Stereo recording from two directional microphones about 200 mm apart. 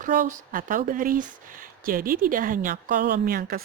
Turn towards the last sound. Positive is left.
turn(degrees=-50)  # may be behind; listen again after turning